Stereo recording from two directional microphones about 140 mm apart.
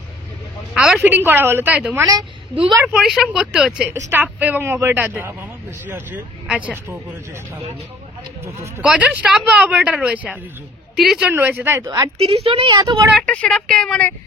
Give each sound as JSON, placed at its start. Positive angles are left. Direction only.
{"t": 0.7, "sound": "a sound", "side_deg": -5}
{"t": 1.1, "sound": "a man's voice", "side_deg": -15}
{"t": 8.8, "sound": "a man's voice", "side_deg": -10}
{"t": 12.2, "sound": "a woman's voice", "side_deg": -45}
{"t": 13.2, "sound": "speech", "side_deg": 5}